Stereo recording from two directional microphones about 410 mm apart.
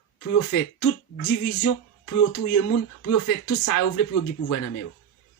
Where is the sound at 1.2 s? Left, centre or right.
Left.